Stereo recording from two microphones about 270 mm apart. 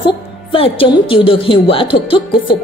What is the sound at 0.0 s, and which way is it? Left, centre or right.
Speech, centre.